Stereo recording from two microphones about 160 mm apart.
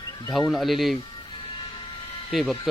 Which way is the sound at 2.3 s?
Centre (ahead or behind).